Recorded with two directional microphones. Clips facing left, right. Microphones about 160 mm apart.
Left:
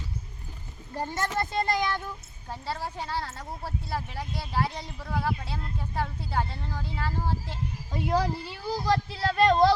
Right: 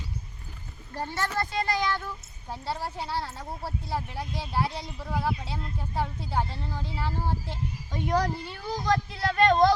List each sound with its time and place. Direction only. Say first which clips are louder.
0.9 s a woman's voice: left 1 dB; 15° left (ahead or behind)
2.5 s speech: right 1 dB; 10° right (ahead or behind)
7.9 s speech: even; 5° left (ahead or behind)
8.9 s speech: even; 30° left (ahead or behind)
9.3 s speech: even; 5° left (ahead or behind)